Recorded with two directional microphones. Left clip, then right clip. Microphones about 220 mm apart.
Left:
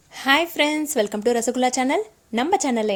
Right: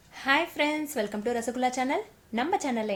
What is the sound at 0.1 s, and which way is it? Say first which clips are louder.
A woman's voice: left 6 dB; 40° left (ahead or behind).